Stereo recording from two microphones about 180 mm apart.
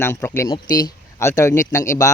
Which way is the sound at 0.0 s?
15° left (ahead or behind).